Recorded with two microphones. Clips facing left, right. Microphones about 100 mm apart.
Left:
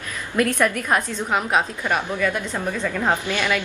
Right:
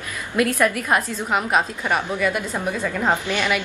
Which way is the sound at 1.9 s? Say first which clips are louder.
Right 1 dB; 15° right (ahead or behind).